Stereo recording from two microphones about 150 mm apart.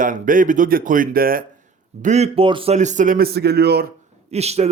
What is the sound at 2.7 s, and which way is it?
Speech, 50° right (ahead or behind).